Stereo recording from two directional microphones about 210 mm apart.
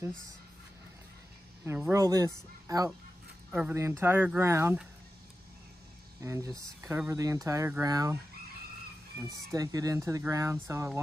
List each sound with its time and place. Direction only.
1.9 s speech: 15° right (ahead or behind)
6.2 s speech: 15° right (ahead or behind)
9.5 s speech: 15° right (ahead or behind)